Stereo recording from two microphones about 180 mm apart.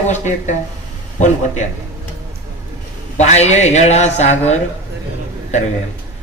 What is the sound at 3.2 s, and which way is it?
Speech, 40° left (ahead or behind).